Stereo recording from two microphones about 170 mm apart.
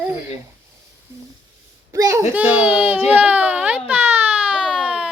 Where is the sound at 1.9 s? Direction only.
20° right (ahead or behind).